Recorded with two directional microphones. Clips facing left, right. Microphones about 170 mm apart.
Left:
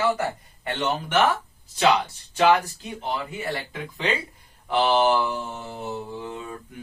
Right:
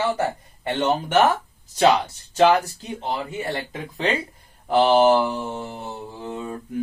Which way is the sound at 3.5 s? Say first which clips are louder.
Right 3 dB; 35° right (ahead or behind).